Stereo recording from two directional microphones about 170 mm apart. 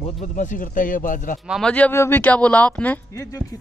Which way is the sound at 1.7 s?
10° left (ahead or behind).